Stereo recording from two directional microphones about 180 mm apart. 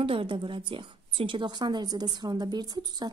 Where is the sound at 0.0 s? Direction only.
30° right (ahead or behind).